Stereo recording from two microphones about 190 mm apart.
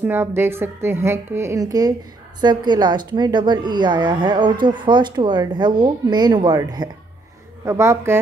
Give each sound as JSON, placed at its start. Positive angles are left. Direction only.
{"t": 0.0, "sound": "a woman's voice", "side_deg": -10}